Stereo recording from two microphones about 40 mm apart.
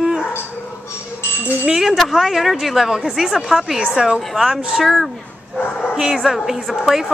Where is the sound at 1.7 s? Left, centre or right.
Centre.